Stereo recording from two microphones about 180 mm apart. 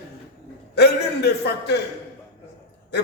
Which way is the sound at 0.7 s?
65° left (ahead or behind).